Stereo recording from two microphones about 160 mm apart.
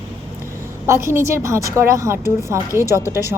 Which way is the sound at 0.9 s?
15° right (ahead or behind).